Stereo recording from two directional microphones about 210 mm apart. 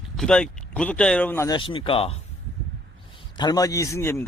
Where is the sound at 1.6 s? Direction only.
25° left (ahead or behind).